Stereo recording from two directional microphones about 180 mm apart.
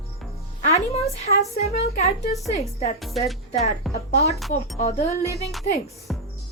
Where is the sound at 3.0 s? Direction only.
Centre (ahead or behind).